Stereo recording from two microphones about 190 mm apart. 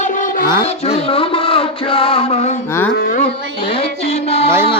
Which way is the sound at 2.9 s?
50° left (ahead or behind).